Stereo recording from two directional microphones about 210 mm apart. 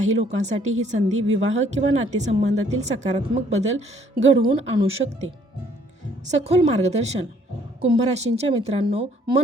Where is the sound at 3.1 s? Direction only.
30° right (ahead or behind).